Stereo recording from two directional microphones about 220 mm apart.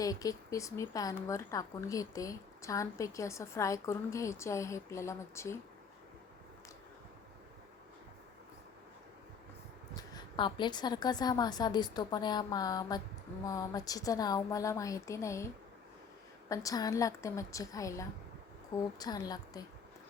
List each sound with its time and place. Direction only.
0.0 s a woman's voice: 15° left (ahead or behind)
9.9 s a woman's voice: 20° left (ahead or behind)
16.5 s a woman's voice: 15° left (ahead or behind)